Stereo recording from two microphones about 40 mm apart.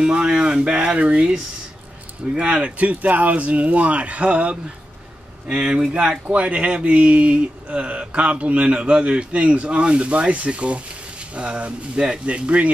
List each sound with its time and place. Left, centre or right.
0.0 s speech: right
2.3 s speech: right